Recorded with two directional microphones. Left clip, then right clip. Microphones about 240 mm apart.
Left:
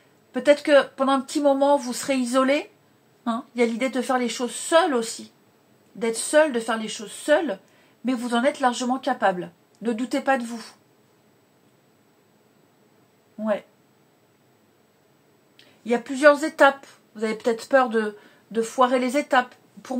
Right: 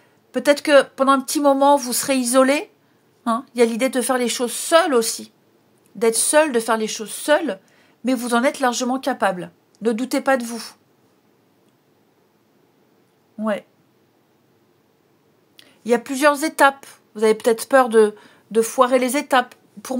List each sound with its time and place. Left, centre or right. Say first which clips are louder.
0.3 s a woman's voice: right 2 dB; right
15.5 s speech: right 5 dB; right